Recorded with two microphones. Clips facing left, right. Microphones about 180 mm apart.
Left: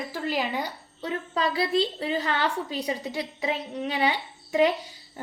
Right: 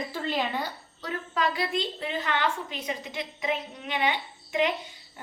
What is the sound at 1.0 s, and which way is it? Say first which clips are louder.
A woman's voice: left 2 dB; 30° left (ahead or behind).